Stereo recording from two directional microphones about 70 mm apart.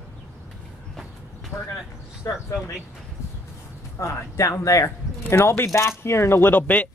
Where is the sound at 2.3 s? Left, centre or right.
Left.